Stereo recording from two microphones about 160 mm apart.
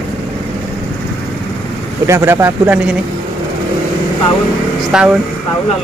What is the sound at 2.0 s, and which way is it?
Speech, 15° right (ahead or behind).